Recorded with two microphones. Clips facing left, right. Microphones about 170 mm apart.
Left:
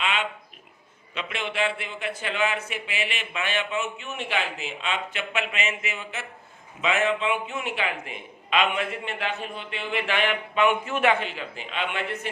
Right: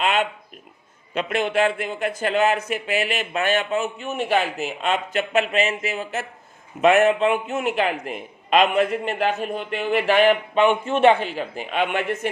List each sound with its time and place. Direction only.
0.0 s a sound: 45° right (ahead or behind)
1.1 s a man's voice: 45° right (ahead or behind)
6.8 s a man's voice: 50° right (ahead or behind); by 11.2 s 30° right (ahead or behind)
11.3 s speech: 45° right (ahead or behind)